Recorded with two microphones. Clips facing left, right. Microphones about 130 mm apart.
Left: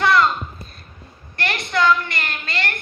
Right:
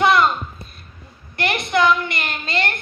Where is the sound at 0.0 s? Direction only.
20° right (ahead or behind).